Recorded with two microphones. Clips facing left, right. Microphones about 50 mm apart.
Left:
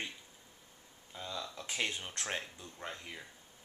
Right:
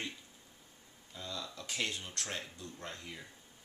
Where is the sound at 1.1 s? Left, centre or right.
Left.